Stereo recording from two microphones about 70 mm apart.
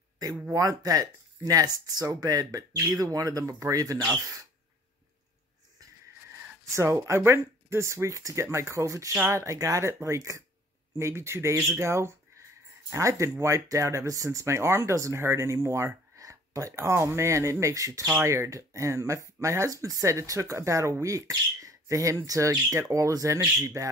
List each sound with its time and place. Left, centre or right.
0.5 s speech: right
6.7 s speech: right